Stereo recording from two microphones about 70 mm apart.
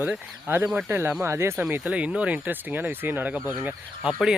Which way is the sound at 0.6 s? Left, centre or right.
Centre.